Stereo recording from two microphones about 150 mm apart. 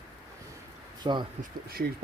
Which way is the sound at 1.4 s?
90° right.